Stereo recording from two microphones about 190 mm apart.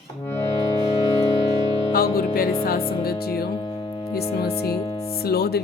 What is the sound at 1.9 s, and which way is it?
Music, 50° left (ahead or behind).